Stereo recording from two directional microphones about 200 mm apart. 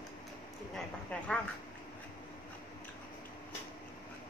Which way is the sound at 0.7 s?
5° left (ahead or behind).